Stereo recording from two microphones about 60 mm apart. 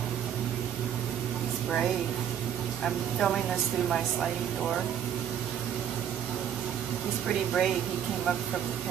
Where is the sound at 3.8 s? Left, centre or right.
Centre.